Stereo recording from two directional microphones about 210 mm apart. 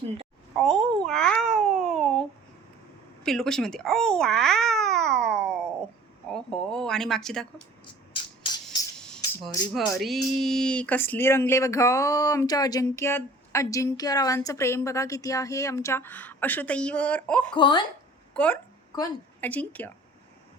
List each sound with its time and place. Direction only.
0.5 s speech: 5° left (ahead or behind)
1.0 s babbling: 5° left (ahead or behind)
3.2 s speech: centre (ahead or behind)
8.1 s music: 25° left (ahead or behind)
8.6 s music: 5° left (ahead or behind)
9.4 s speech: centre (ahead or behind)
17.5 s speech: 20° left (ahead or behind)
18.3 s speech: 5° left (ahead or behind)
18.9 s a woman's voice: 15° left (ahead or behind)
19.5 s speech: 5° left (ahead or behind)